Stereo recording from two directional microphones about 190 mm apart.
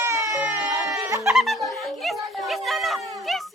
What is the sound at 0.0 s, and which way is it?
Music, 15° right (ahead or behind).